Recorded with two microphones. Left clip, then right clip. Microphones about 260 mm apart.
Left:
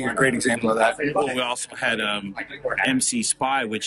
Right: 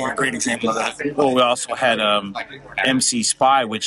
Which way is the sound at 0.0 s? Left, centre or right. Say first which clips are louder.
Even; centre.